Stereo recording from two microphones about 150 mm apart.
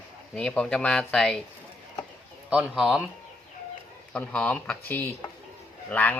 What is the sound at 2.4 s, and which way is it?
Speech, 10° right (ahead or behind).